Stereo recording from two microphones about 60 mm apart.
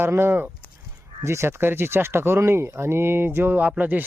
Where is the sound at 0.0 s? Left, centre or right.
Right.